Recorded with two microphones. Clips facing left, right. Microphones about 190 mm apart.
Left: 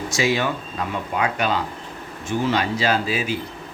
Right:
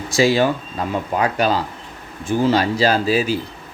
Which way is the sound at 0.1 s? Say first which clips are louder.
Right 7 dB; 35° right (ahead or behind).